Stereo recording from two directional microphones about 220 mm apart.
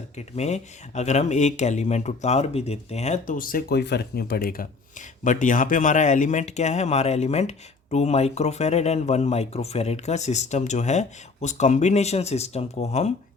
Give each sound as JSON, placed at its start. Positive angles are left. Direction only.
{"t": 0.2, "sound": "speech", "side_deg": 30}